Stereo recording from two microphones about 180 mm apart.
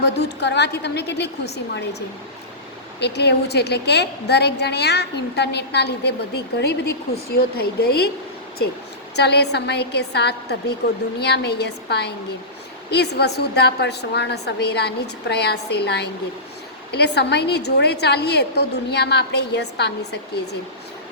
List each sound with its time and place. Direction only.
0.0 s a woman's voice: 70° left (ahead or behind)
9.1 s a woman's voice: 65° left (ahead or behind)